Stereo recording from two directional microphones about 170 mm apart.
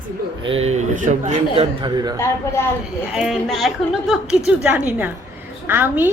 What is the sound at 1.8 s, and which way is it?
Speech, 25° right (ahead or behind).